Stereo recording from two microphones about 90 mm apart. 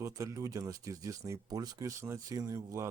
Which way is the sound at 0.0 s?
40° right (ahead or behind).